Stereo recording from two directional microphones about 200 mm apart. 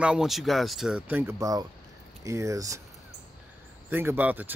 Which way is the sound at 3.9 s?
10° right (ahead or behind).